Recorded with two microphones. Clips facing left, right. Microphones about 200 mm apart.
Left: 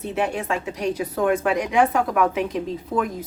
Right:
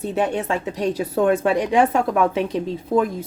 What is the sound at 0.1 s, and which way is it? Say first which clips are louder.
Speech: right 2 dB; 30° right (ahead or behind).